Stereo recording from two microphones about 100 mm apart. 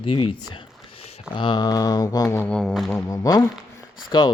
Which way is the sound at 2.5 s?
5° left (ahead or behind).